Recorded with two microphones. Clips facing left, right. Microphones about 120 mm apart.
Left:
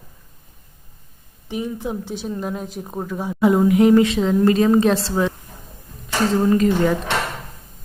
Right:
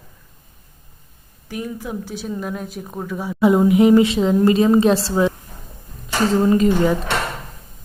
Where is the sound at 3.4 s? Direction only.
10° right (ahead or behind).